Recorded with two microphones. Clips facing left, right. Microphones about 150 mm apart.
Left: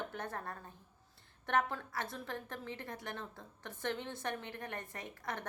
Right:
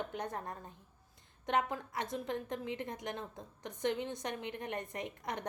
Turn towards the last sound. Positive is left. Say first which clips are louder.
# right 3 dB
turn(degrees=-20)  # may be behind; listen again after turning